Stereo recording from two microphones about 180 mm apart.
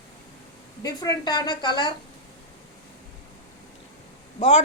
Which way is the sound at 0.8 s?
20° left (ahead or behind).